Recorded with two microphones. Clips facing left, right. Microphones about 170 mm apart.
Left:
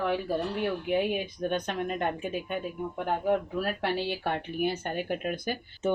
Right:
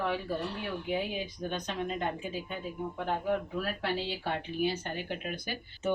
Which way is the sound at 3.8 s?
60° left (ahead or behind).